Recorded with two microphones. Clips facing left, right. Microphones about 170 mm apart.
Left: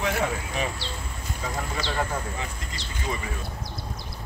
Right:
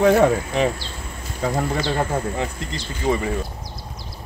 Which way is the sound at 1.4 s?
40° right (ahead or behind).